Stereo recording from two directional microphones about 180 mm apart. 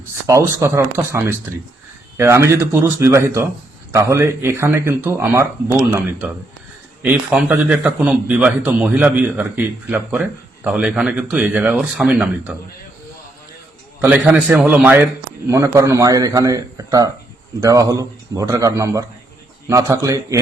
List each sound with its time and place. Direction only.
0.3 s speech: 15° right (ahead or behind)
14.0 s a man's voice: 10° right (ahead or behind)